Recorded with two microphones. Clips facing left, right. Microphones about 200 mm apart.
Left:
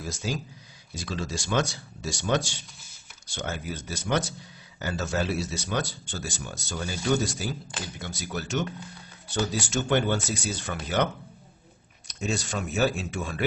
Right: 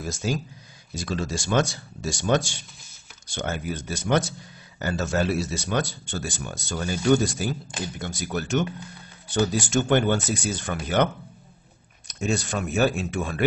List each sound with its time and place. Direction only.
0.1 s speech: 50° right (ahead or behind)
12.1 s speech: 55° right (ahead or behind)